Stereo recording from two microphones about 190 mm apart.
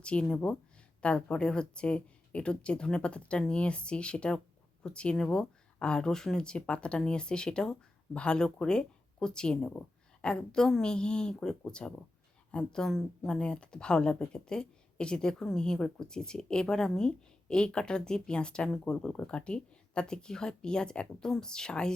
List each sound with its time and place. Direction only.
0.0 s speech: 5° left (ahead or behind)